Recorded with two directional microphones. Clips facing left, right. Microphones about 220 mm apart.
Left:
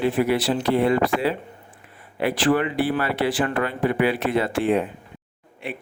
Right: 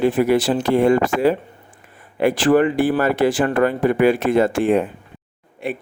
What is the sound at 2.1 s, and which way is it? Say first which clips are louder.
Speech: right 5 dB; 45° right (ahead or behind).